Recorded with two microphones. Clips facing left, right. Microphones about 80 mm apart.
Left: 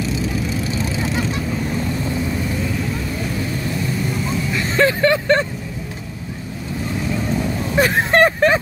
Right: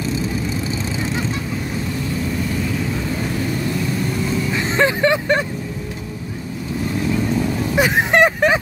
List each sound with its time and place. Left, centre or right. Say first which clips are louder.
4.6 s vehicle: left 1 dB; right
7.7 s vehicle: left 1 dB; centre